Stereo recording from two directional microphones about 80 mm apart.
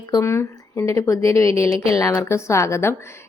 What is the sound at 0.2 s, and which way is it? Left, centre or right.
Speech, left.